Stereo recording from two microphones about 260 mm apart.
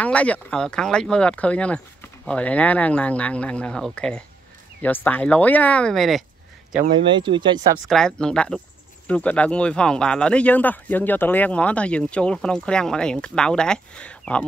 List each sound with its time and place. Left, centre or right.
0.0 s speech: centre
7.1 s speech: centre
7.9 s speech: centre